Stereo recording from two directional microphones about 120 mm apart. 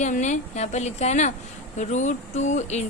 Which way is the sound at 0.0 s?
80° left.